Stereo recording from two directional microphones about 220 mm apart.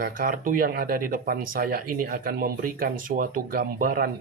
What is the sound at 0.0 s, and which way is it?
Speech, 40° right (ahead or behind).